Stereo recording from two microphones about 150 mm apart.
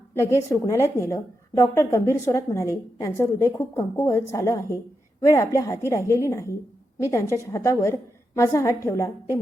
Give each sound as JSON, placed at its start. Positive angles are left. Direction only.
{"t": 0.1, "sound": "a woman's voice", "side_deg": 15}